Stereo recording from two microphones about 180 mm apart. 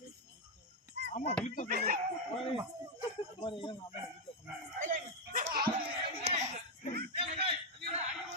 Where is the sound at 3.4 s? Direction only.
30° left (ahead or behind).